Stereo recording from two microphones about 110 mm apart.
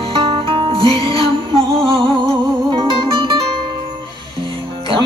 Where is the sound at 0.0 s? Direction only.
55° right (ahead or behind).